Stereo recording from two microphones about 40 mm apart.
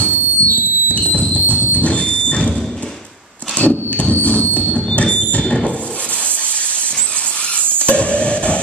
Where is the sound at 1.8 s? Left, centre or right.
Left.